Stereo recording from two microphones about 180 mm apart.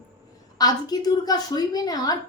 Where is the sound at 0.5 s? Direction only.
20° left (ahead or behind).